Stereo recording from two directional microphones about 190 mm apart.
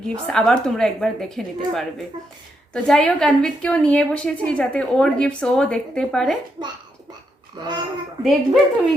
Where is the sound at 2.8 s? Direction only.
5° left (ahead or behind).